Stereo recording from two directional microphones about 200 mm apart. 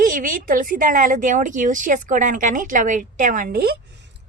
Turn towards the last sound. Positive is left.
turn(degrees=-50)  # may be behind; listen again after turning